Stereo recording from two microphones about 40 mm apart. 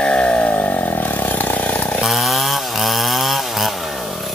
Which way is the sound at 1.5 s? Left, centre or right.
Left.